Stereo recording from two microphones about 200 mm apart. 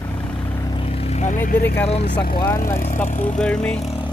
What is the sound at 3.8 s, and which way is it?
Vehicle, 30° left (ahead or behind).